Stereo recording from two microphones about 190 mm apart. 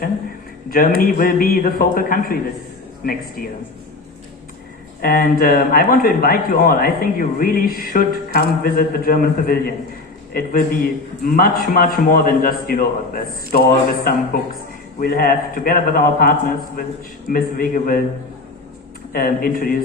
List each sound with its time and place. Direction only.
0.7 s a man's voice: 45° left (ahead or behind)
5.0 s a man's voice: 50° left (ahead or behind)
19.1 s a man's voice: 50° left (ahead or behind)